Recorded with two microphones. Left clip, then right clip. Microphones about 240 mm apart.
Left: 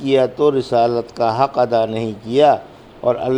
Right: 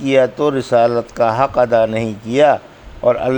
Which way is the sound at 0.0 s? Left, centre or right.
Right.